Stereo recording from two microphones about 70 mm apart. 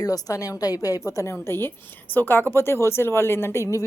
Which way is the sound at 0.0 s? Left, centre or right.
Left.